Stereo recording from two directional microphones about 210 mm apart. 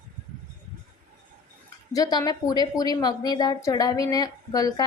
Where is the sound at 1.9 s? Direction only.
20° left (ahead or behind).